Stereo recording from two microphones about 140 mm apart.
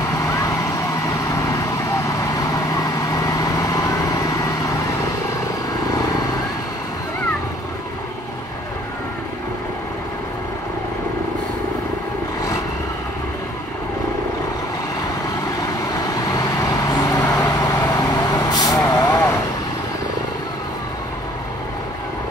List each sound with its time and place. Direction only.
0.1 s vehicle: 25° left (ahead or behind)
16.2 s vehicle: 25° left (ahead or behind)